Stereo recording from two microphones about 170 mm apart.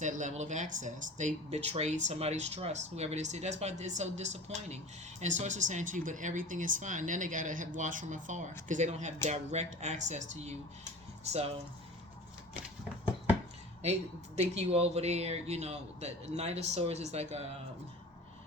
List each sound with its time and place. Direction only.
0.0 s speech: 45° right (ahead or behind)
14.3 s speech: 40° right (ahead or behind)